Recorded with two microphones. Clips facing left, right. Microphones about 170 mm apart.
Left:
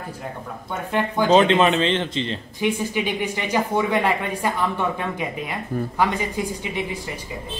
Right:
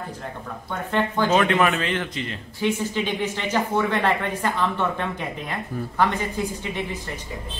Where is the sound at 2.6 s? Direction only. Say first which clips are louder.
Left 1 dB; 15° left (ahead or behind).